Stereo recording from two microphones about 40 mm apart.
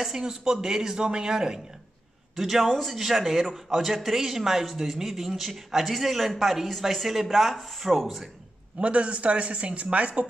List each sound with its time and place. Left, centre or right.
0.0 s a woman's voice: centre
2.3 s a man's voice: centre
8.7 s speech: right